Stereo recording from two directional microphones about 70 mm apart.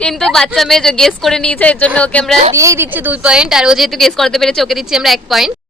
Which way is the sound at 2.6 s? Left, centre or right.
Right.